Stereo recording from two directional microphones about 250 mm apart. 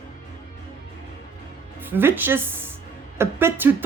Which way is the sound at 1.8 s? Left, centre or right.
Centre.